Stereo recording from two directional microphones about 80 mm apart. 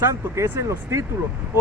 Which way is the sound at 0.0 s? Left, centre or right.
Right.